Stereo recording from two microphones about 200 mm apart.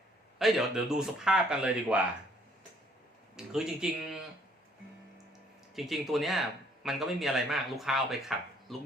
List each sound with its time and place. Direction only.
0.3 s speech: centre (ahead or behind)
3.3 s speech: 5° right (ahead or behind)
5.7 s speech: centre (ahead or behind)